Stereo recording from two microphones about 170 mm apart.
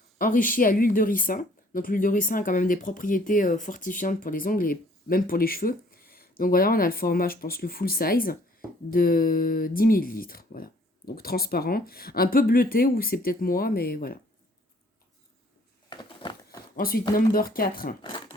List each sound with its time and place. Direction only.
0.2 s speech: 55° left (ahead or behind)
15.9 s a sound: 30° left (ahead or behind)
16.7 s speech: 60° left (ahead or behind)
18.0 s speech: 30° left (ahead or behind)